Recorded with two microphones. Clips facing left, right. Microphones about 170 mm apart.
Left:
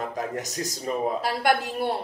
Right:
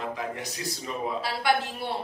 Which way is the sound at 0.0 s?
45° left (ahead or behind).